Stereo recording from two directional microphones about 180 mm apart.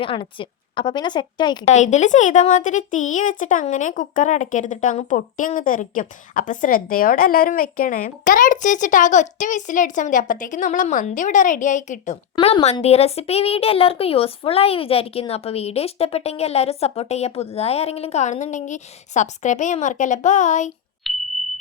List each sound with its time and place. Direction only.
0.0 s a woman's voice: 30° left (ahead or behind)
1.6 s a woman's voice: 40° left (ahead or behind)
21.0 s a sound: centre (ahead or behind)